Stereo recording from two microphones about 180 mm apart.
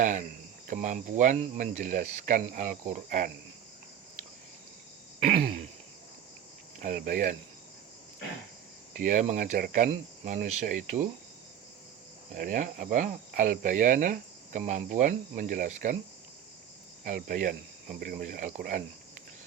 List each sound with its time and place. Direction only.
0.0 s cricket: 45° right (ahead or behind)
5.2 s cricket: 55° right (ahead or behind)
6.7 s cricket: 45° right (ahead or behind)
9.0 s cricket: 45° right (ahead or behind)
12.3 s cricket: 45° right (ahead or behind)
17.0 s cricket: 50° right (ahead or behind)